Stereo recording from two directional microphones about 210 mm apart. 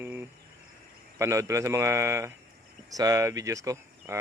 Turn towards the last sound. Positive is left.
turn(degrees=-15)  # may be behind; listen again after turning